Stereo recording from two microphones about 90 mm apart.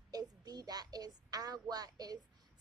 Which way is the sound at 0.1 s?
50° right (ahead or behind).